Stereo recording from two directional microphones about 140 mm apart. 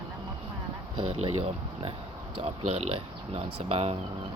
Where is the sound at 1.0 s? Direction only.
45° right (ahead or behind).